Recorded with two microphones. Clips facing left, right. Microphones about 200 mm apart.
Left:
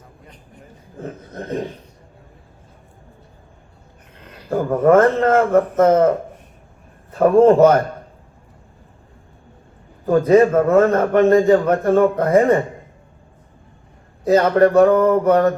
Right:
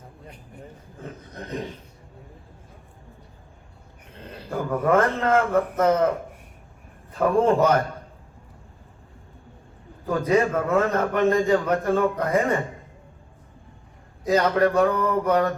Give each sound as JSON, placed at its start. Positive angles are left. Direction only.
{"t": 1.0, "sound": "a sound", "side_deg": 45}
{"t": 4.1, "sound": "a sound", "side_deg": -30}
{"t": 4.5, "sound": "a man's voice", "side_deg": 45}
{"t": 7.2, "sound": "a man's voice", "side_deg": 45}
{"t": 10.1, "sound": "a man's voice", "side_deg": 45}
{"t": 14.3, "sound": "a man's voice", "side_deg": 45}